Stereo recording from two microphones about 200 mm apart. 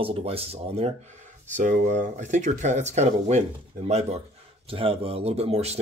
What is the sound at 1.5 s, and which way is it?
Speech, 40° right (ahead or behind).